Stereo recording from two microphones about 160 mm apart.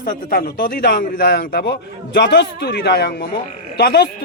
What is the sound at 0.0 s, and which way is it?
A man's voice, 65° left (ahead or behind).